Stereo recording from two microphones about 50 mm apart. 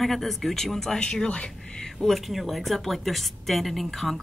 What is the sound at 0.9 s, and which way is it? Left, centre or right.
Speech, centre.